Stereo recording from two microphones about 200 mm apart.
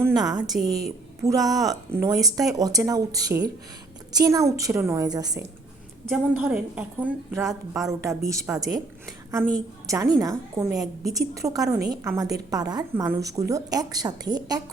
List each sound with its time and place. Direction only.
0.0 s a woman's voice: 20° right (ahead or behind)
6.1 s a woman's voice: 5° right (ahead or behind)
9.8 s a woman's voice: 15° right (ahead or behind)